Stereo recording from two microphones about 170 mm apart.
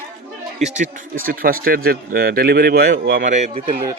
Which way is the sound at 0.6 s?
45° right (ahead or behind).